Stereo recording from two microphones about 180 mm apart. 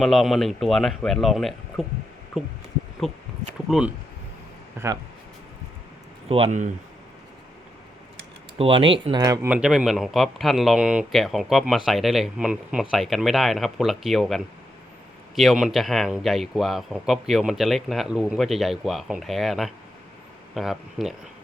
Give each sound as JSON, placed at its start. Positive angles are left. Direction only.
{"t": 0.0, "sound": "speech", "side_deg": 0}
{"t": 6.2, "sound": "speech", "side_deg": -35}
{"t": 8.5, "sound": "speech", "side_deg": -30}
{"t": 9.2, "sound": "speech", "side_deg": -15}
{"t": 9.6, "sound": "speech", "side_deg": -5}